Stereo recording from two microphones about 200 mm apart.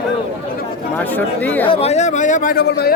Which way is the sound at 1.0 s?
10° left (ahead or behind).